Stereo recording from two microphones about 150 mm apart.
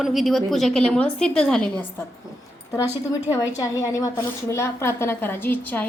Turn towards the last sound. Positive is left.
turn(degrees=10)  # may be behind; listen again after turning